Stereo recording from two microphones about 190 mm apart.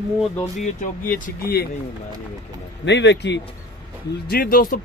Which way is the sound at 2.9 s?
65° left (ahead or behind).